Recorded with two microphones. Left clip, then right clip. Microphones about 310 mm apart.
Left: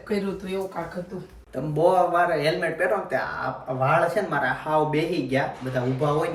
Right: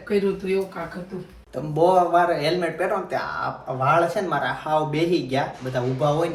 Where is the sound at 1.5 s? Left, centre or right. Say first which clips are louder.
Right 2 dB; centre.